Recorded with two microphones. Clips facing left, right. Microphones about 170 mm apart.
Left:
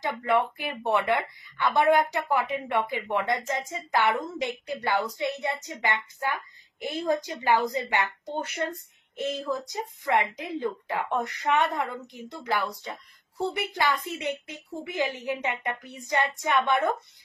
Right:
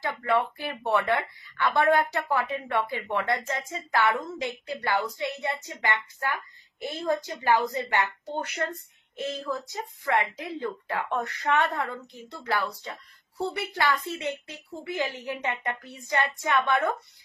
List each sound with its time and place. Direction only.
0.0 s speech: 15° left (ahead or behind)
9.5 s speech: 15° left (ahead or behind)